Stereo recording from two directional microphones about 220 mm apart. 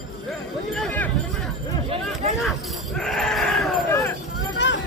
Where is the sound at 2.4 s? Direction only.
Centre (ahead or behind).